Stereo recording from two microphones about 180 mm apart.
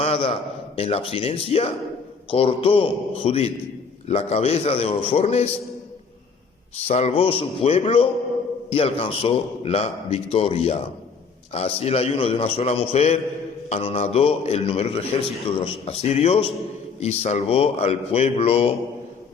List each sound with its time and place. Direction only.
0.0 s a man's voice: 30° left (ahead or behind)
6.7 s a man's voice: 35° left (ahead or behind)